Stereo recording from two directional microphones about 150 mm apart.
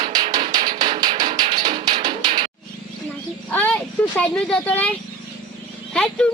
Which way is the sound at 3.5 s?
10° left (ahead or behind).